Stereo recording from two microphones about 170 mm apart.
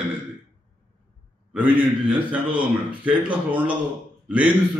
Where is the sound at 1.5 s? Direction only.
5° right (ahead or behind).